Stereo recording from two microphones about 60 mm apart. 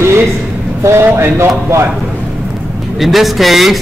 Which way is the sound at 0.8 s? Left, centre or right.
Right.